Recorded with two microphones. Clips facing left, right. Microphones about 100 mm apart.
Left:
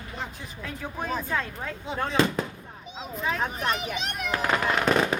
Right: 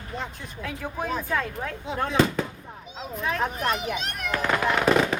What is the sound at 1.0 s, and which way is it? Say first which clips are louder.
Speech: right 2 dB; centre (ahead or behind).